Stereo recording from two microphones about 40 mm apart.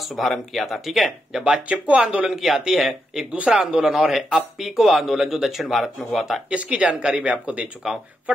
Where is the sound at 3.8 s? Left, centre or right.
Right.